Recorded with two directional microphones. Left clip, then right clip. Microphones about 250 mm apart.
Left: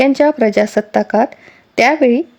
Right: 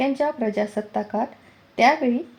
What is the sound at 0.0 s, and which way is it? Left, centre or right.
Speech, left.